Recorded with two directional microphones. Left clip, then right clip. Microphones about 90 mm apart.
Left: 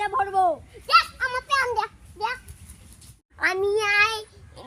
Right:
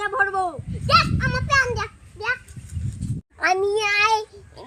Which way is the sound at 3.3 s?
20° left (ahead or behind).